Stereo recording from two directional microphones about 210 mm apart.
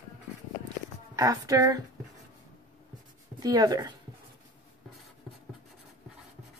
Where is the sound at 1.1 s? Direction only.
15° right (ahead or behind).